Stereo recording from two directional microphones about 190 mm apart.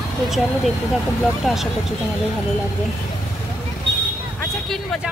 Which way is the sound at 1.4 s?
Centre (ahead or behind).